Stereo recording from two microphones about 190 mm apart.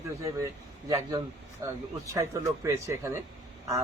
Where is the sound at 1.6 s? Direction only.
15° right (ahead or behind).